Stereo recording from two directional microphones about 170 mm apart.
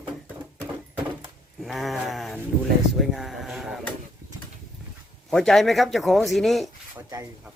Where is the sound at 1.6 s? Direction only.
Centre (ahead or behind).